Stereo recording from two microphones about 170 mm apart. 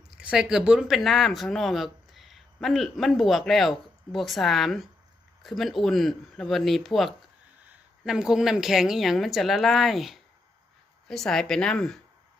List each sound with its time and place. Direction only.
0.2 s a woman's voice: 5° right (ahead or behind)